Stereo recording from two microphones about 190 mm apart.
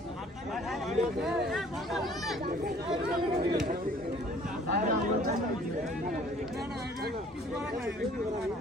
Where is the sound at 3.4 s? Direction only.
55° right (ahead or behind).